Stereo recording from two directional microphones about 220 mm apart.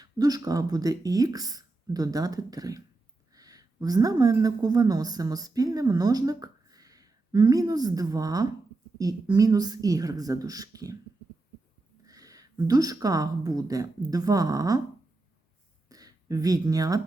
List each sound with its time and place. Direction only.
0.0 s a woman's voice: 15° right (ahead or behind)
12.0 s a woman's voice: 15° right (ahead or behind)
15.9 s a sound: 15° right (ahead or behind)